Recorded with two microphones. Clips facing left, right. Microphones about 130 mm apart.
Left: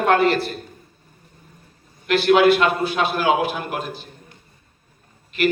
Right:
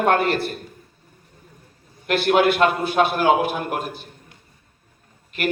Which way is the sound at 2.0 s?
50° right (ahead or behind).